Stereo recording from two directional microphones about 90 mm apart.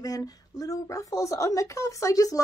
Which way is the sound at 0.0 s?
45° left (ahead or behind).